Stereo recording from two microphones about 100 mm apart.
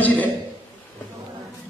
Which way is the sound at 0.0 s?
15° left (ahead or behind).